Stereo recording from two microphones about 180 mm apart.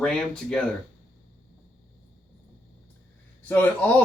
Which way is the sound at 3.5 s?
10° left (ahead or behind).